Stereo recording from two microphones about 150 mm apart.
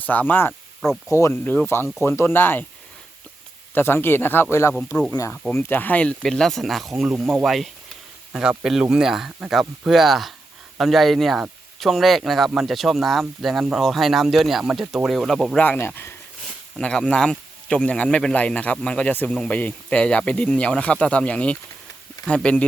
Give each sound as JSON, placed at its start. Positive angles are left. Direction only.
{"t": 0.0, "sound": "speech", "side_deg": 10}
{"t": 3.8, "sound": "speech", "side_deg": 15}
{"t": 16.7, "sound": "speech", "side_deg": 5}